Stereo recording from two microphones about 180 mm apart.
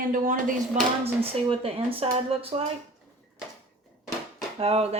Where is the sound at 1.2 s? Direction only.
30° right (ahead or behind).